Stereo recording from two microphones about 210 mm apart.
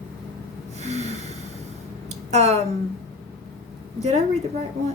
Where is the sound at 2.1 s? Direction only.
30° right (ahead or behind).